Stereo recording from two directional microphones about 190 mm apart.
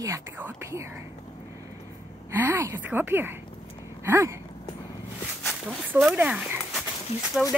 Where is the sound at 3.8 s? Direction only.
15° right (ahead or behind).